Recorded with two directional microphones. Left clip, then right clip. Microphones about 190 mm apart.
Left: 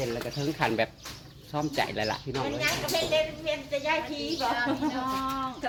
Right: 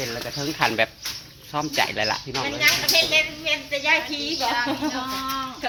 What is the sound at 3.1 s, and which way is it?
Speech, 10° left (ahead or behind).